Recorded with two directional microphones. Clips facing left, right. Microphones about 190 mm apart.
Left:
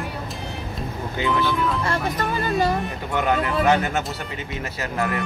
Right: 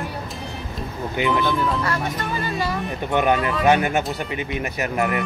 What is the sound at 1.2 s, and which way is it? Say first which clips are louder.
Speech: right 2 dB; 15° right (ahead or behind).